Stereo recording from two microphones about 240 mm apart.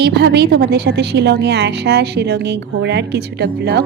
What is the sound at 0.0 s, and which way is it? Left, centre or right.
A woman's voice, right.